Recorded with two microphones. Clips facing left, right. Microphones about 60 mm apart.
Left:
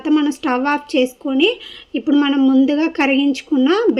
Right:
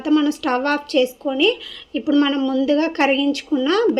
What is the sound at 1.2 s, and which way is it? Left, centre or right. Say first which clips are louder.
A woman's voice: left 2 dB; centre.